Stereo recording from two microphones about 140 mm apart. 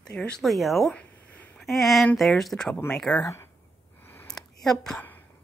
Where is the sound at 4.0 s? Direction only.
15° left (ahead or behind).